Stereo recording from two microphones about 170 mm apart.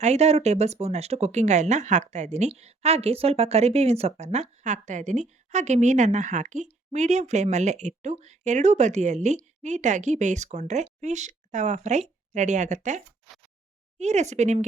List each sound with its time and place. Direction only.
0.0 s speech: 40° right (ahead or behind)
14.0 s speech: 40° right (ahead or behind)